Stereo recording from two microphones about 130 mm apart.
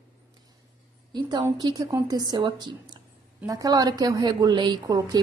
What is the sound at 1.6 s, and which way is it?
A woman's voice, 30° right (ahead or behind).